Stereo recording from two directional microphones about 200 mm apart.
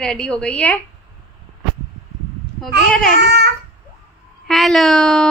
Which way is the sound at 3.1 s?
55° right (ahead or behind).